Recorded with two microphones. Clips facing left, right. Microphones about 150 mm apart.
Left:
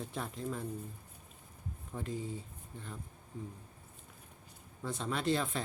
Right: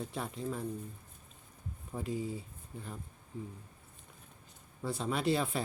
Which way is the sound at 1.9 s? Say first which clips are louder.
Right 3 dB; 5° right (ahead or behind).